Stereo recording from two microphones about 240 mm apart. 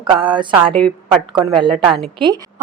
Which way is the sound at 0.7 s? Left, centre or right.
Centre.